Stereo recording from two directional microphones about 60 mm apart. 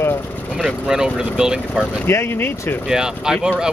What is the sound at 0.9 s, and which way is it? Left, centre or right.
Speech, centre.